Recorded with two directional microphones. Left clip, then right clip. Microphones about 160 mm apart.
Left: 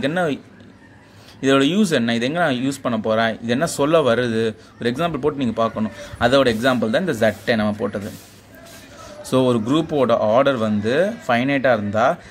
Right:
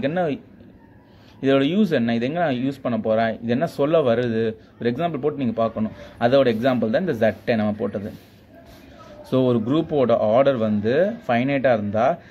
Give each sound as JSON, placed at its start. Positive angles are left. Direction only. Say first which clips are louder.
{"t": 0.0, "sound": "speech", "louder": "left 2 dB", "side_deg": -5}
{"t": 1.4, "sound": "speech", "louder": "left 2 dB", "side_deg": -5}
{"t": 9.2, "sound": "speech", "louder": "left 2 dB", "side_deg": -5}